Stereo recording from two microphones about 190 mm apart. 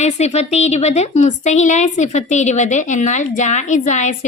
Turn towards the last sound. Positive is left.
turn(degrees=40)  # may be behind; listen again after turning